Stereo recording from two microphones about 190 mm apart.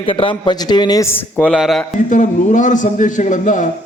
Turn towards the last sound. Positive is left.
turn(degrees=40)  # may be behind; listen again after turning